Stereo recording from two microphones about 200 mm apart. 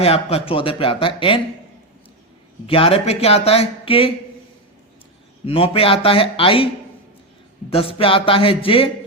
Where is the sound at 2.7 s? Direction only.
30° left (ahead or behind).